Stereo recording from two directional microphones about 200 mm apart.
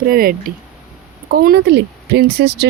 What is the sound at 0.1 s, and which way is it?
Speech, 45° right (ahead or behind).